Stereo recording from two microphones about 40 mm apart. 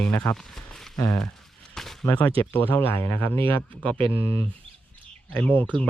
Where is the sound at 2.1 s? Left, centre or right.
Left.